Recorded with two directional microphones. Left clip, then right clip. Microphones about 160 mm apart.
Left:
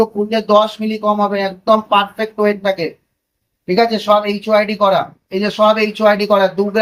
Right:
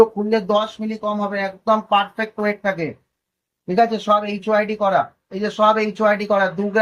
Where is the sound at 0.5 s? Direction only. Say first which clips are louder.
Left 8 dB; 15° left (ahead or behind).